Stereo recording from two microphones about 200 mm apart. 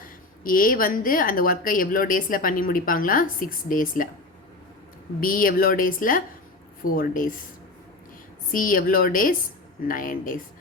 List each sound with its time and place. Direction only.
0.4 s speech: 45° left (ahead or behind)
5.2 s speech: 45° left (ahead or behind)
8.5 s speech: 45° left (ahead or behind)